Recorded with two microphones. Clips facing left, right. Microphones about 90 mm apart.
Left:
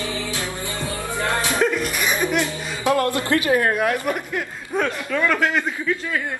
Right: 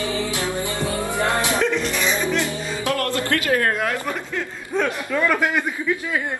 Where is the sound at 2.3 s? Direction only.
20° left (ahead or behind).